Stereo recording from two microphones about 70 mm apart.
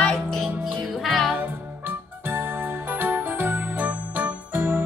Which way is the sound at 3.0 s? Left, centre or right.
Right.